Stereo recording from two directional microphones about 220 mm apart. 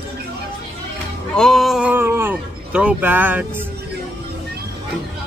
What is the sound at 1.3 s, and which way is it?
Speech, centre (ahead or behind).